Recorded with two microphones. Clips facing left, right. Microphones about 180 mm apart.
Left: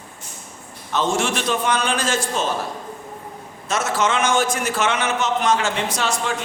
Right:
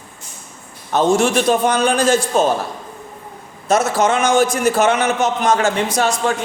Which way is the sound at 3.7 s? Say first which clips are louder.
Right 6 dB; 40° right (ahead or behind).